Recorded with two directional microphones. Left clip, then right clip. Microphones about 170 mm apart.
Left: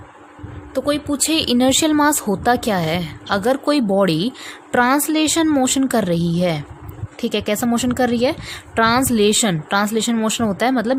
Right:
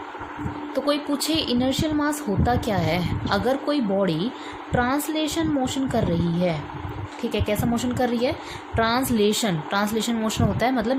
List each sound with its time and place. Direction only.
0.7 s a woman's voice: 55° left (ahead or behind)